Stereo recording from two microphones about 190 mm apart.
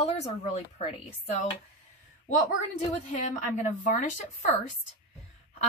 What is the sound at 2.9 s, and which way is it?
Speech, 40° left (ahead or behind).